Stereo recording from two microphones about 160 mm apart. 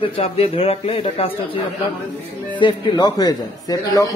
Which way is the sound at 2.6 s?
25° left (ahead or behind).